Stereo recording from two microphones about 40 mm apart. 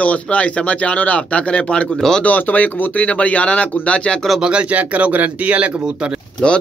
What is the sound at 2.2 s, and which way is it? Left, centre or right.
Speech, left.